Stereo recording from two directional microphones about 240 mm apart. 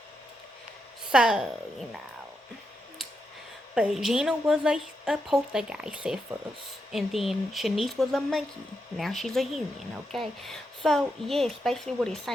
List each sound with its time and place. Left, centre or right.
1.1 s a woman's voice: centre
3.8 s a woman's voice: centre